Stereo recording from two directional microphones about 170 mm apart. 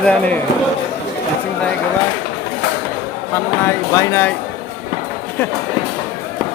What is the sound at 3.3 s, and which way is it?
Speech, 15° left (ahead or behind).